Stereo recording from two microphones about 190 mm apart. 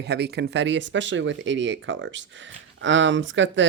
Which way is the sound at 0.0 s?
60° right (ahead or behind).